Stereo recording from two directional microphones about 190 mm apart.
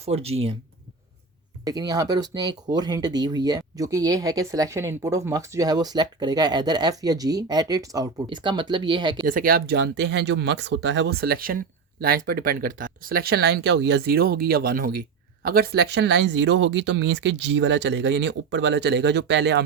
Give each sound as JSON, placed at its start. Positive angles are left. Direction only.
{"t": 0.0, "sound": "speech", "side_deg": -30}
{"t": 1.6, "sound": "speech", "side_deg": -20}
{"t": 9.2, "sound": "speech", "side_deg": -50}